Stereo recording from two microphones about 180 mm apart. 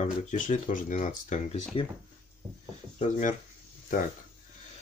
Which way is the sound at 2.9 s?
45° left (ahead or behind).